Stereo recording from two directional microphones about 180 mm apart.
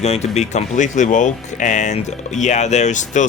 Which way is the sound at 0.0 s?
35° left (ahead or behind).